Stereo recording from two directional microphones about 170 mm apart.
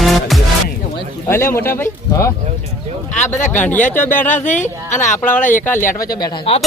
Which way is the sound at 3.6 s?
10° left (ahead or behind).